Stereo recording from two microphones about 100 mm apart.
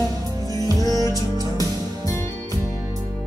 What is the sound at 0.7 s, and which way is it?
Music, 40° right (ahead or behind).